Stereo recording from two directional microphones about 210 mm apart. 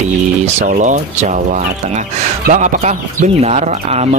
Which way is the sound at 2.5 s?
35° right (ahead or behind).